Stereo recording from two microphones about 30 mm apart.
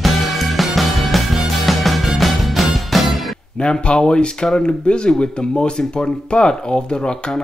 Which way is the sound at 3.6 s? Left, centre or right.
Left.